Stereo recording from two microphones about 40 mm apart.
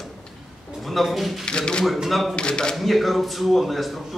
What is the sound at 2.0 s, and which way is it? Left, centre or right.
Speech, centre.